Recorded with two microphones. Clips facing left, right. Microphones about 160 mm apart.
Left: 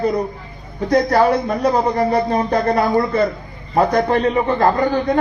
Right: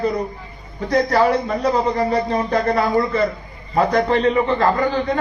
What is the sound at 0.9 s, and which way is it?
Speech, 45° left (ahead or behind).